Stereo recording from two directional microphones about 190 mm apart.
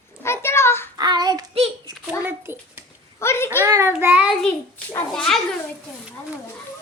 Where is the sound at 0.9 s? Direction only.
20° right (ahead or behind).